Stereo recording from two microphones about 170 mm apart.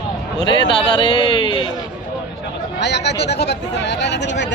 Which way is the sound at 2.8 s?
90° left.